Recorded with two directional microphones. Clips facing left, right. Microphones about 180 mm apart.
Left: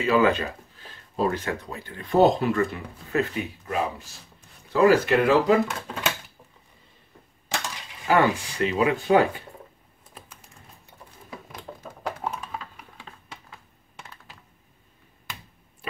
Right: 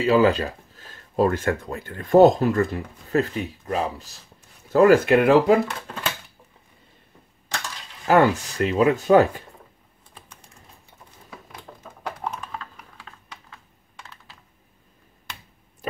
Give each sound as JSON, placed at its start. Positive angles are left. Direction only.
{"t": 0.0, "sound": "speech", "side_deg": -35}
{"t": 4.6, "sound": "speech", "side_deg": -50}
{"t": 5.7, "sound": "speech", "side_deg": 0}
{"t": 8.1, "sound": "speech", "side_deg": -45}
{"t": 11.8, "sound": "typing", "side_deg": 5}
{"t": 15.8, "sound": "a sound", "side_deg": -40}